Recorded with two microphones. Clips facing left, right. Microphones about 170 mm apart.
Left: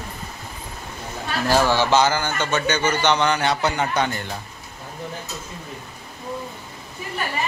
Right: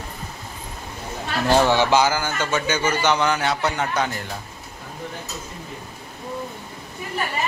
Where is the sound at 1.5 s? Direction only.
20° right (ahead or behind); by 4.3 s centre (ahead or behind).